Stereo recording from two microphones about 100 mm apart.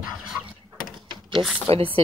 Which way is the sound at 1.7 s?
70° right (ahead or behind).